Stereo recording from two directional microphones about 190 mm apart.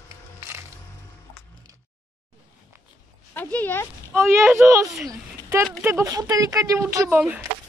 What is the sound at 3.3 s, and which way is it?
Speech, 10° left (ahead or behind).